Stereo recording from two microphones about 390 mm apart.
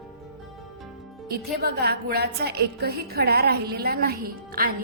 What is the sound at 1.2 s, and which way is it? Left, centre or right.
A woman's voice, right.